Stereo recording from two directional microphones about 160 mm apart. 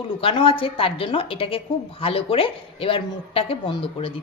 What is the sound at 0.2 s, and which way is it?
A woman's voice, 35° left (ahead or behind).